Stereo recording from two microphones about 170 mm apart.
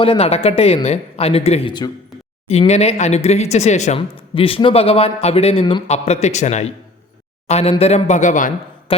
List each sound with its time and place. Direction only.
0.0 s speech: 35° left (ahead or behind)
2.5 s speech: 40° left (ahead or behind)
8.9 s speech: 35° left (ahead or behind)